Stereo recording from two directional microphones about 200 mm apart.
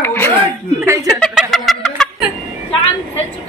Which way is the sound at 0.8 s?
15° right (ahead or behind).